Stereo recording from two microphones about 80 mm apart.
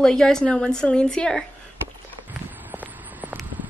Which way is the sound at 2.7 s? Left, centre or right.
Right.